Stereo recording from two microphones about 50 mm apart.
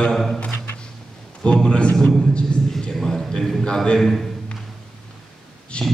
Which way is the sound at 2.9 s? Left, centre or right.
Centre.